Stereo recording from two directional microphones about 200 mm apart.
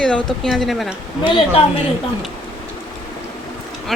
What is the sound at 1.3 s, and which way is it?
Speech, 25° left (ahead or behind).